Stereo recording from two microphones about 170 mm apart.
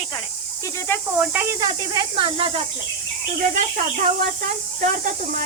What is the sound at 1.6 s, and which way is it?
Speech, 25° right (ahead or behind).